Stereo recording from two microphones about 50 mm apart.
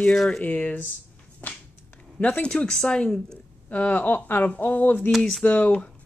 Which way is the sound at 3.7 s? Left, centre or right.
Left.